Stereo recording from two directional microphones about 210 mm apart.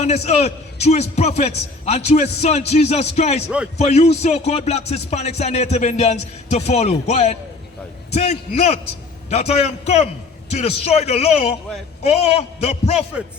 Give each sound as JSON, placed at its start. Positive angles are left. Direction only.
{"t": 0.0, "sound": "a man's voice", "side_deg": 30}